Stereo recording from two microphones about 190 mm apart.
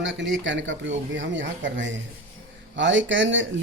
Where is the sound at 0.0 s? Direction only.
75° right (ahead or behind).